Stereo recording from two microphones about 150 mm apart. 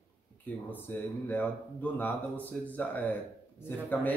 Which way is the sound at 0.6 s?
10° left (ahead or behind).